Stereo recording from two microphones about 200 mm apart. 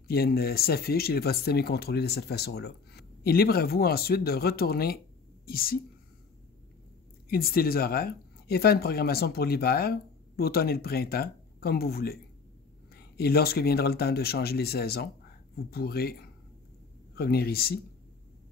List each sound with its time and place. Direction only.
0.1 s speech: 50° left (ahead or behind)
7.2 s speech: 50° left (ahead or behind)